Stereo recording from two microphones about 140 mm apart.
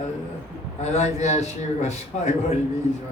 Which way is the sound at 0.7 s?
55° left (ahead or behind).